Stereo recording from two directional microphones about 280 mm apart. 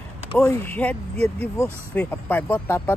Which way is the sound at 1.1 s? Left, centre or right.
Right.